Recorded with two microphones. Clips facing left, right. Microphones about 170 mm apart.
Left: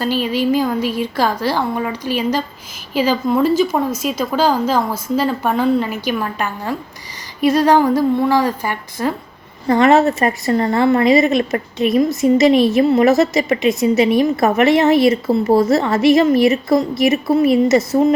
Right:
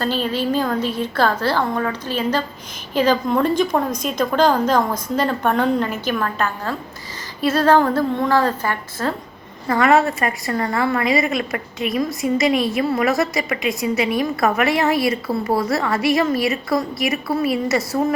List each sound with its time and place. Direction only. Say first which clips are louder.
0.0 s a woman's voice: left 3 dB; 10° left (ahead or behind)